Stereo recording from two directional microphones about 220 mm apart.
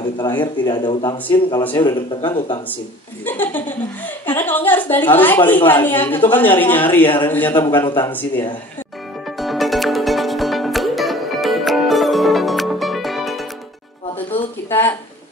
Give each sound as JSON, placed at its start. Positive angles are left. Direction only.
{"t": 0.2, "sound": "speech", "side_deg": 20}
{"t": 1.2, "sound": "speech", "side_deg": 10}
{"t": 1.8, "sound": "speech", "side_deg": 20}
{"t": 3.3, "sound": "speech", "side_deg": 10}
{"t": 9.4, "sound": "music", "side_deg": 0}
{"t": 14.7, "sound": "a sound", "side_deg": 10}